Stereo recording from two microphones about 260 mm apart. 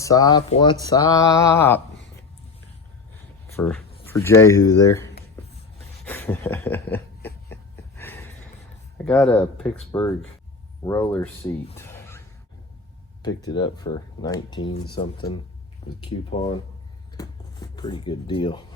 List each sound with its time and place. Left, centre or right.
0.0 s speech: centre
3.5 s speech: centre
6.1 s a sound: centre
9.0 s speech: centre
11.8 s a sound: centre
13.2 s speech: centre
17.2 s speech: centre